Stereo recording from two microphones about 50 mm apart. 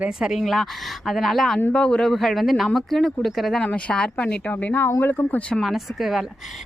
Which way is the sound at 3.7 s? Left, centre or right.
Left.